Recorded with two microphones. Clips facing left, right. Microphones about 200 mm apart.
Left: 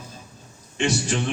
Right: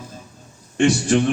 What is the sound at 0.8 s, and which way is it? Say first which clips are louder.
Speech: right 8 dB; 55° right (ahead or behind).